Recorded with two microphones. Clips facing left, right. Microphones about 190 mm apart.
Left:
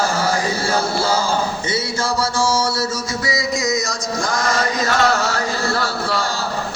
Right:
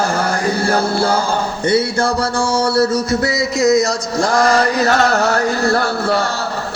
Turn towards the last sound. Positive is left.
turn(degrees=-55)  # may be behind; listen again after turning